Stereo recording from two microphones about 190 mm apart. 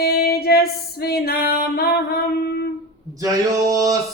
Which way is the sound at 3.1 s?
15° right (ahead or behind).